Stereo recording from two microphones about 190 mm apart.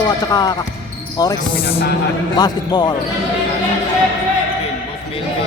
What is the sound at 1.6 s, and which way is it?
Speech, 55° left (ahead or behind).